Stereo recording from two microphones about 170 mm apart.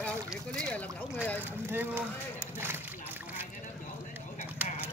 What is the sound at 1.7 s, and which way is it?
Speech, 10° right (ahead or behind).